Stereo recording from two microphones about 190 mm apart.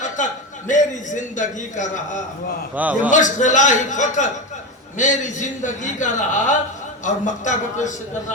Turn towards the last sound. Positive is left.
turn(degrees=40)  # may be behind; listen again after turning